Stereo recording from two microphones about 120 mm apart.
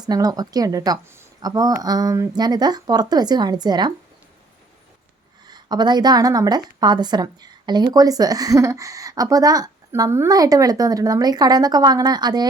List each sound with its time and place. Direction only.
0.0 s a woman's voice: 35° right (ahead or behind)
5.5 s a woman's voice: 35° right (ahead or behind)